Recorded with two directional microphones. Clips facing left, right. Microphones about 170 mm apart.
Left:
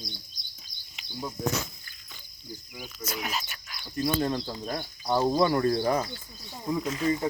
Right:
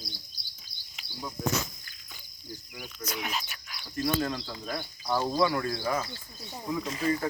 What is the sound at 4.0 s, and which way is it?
Speech, 25° left (ahead or behind).